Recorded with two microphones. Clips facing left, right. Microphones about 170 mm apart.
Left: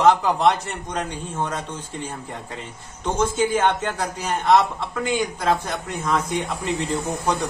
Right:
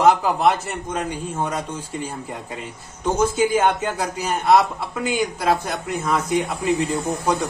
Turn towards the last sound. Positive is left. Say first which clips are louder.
# right 2 dB
turn(degrees=-10)  # may be behind; listen again after turning